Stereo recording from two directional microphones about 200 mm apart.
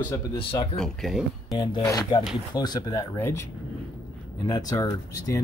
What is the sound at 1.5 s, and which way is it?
Speech, 20° left (ahead or behind).